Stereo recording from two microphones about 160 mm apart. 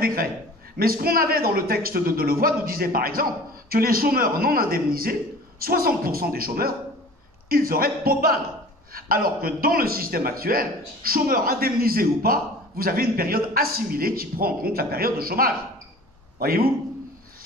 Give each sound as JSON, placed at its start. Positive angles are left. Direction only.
{"t": 0.0, "sound": "a man's voice", "side_deg": -70}